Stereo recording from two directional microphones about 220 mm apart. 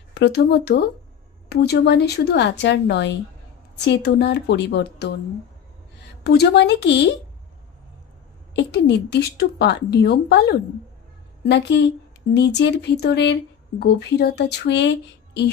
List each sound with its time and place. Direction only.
0.1 s a woman's voice: 50° left (ahead or behind)
6.2 s a woman's voice: 45° left (ahead or behind)
8.5 s a woman's voice: 50° left (ahead or behind)